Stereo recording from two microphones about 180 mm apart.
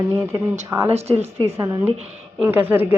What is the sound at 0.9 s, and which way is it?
Speech, 35° right (ahead or behind).